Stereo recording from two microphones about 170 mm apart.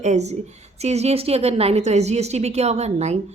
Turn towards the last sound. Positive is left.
turn(degrees=-40)  # may be behind; listen again after turning